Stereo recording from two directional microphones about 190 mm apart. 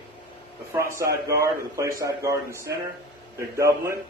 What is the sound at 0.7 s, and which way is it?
Speech, 15° right (ahead or behind).